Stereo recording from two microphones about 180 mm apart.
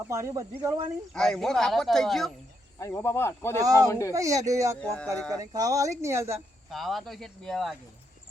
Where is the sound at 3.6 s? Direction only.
20° right (ahead or behind).